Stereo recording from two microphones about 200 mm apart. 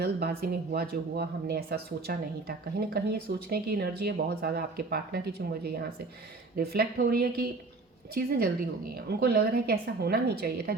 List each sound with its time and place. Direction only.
0.0 s speech: 50° right (ahead or behind)